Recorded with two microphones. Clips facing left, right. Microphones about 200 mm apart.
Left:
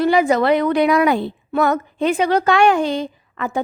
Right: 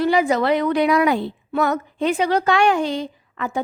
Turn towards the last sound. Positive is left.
turn(degrees=55)  # may be behind; listen again after turning